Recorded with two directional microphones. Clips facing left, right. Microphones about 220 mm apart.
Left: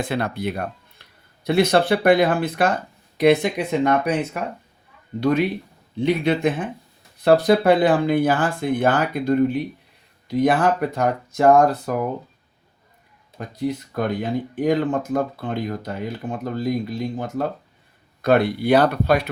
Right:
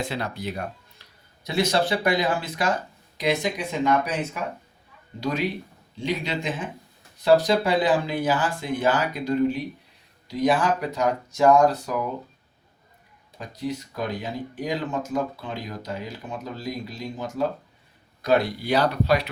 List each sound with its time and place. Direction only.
0.0 s speech: 55° left (ahead or behind)
5.2 s speech: 60° left (ahead or behind)
13.4 s speech: 55° left (ahead or behind)